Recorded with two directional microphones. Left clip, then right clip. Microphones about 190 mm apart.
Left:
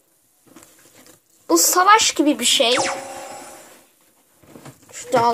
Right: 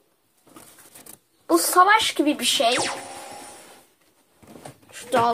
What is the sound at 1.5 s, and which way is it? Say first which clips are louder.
A woman's voice: left 3 dB; 40° left (ahead or behind).